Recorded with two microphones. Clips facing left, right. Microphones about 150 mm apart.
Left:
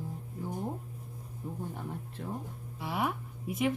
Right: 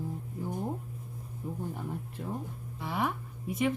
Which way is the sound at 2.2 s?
10° right (ahead or behind).